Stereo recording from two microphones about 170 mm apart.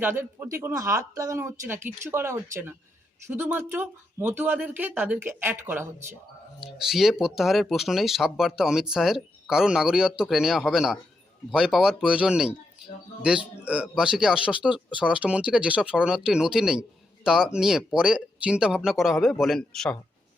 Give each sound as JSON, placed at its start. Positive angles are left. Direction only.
{"t": 0.0, "sound": "speech", "side_deg": -15}
{"t": 6.6, "sound": "speech", "side_deg": -5}
{"t": 13.7, "sound": "speech", "side_deg": -5}